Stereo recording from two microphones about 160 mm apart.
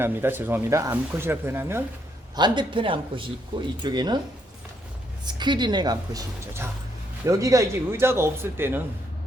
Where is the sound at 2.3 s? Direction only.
30° right (ahead or behind).